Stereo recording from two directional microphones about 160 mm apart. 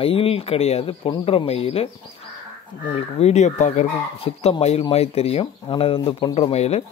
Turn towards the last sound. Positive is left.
turn(degrees=40)  # may be behind; listen again after turning